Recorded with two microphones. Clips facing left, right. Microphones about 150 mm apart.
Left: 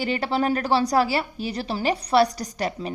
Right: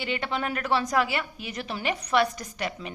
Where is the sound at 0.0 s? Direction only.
40° left (ahead or behind).